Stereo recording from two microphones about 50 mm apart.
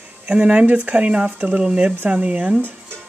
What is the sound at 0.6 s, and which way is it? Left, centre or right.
Speech, right.